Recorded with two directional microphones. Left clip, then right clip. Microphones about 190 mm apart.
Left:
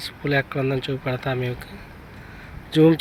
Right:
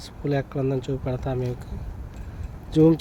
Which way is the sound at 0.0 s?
10° right (ahead or behind).